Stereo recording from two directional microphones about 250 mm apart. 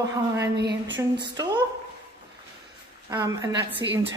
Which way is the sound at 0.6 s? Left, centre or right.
Right.